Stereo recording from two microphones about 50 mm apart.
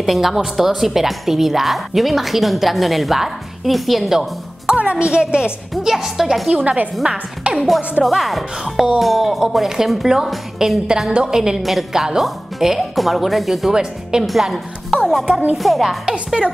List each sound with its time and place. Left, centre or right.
0.0 s a woman's voice: centre
4.7 s a woman's voice: right
6.6 s a woman's voice: right
7.5 s a woman's voice: centre
10.9 s a woman's voice: centre
16.1 s a woman's voice: centre